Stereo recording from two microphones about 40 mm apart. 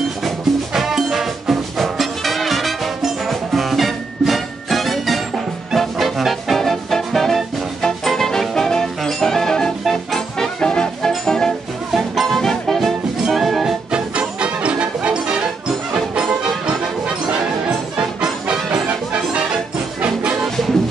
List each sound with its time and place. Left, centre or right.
0.7 s music: centre
10.6 s music: centre
13.3 s music: centre
13.9 s music: right
17.3 s music: right
20.0 s music: right